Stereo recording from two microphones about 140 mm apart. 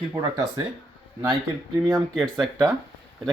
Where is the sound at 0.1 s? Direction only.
25° right (ahead or behind).